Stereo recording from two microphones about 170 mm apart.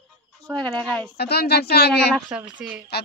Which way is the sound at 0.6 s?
5° left (ahead or behind).